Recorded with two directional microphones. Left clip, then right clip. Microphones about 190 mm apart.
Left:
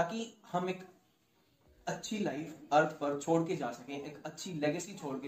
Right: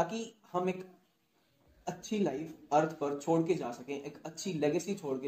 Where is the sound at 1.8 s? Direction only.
50° right (ahead or behind).